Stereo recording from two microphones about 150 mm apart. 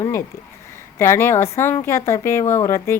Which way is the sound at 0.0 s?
20° left (ahead or behind).